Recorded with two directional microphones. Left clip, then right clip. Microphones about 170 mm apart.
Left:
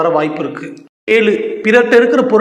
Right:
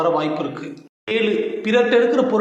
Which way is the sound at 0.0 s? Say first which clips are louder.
Left 5 dB; 30° left (ahead or behind).